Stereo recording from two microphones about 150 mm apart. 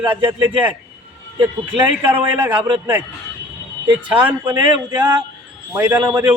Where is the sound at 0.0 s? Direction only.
35° right (ahead or behind).